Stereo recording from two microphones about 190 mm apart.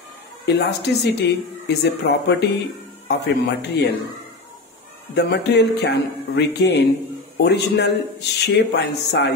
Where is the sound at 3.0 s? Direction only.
60° left (ahead or behind).